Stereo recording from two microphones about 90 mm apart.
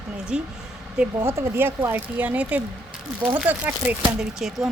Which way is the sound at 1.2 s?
30° right (ahead or behind).